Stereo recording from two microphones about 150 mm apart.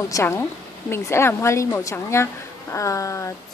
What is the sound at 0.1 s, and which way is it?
A woman's voice, 15° left (ahead or behind).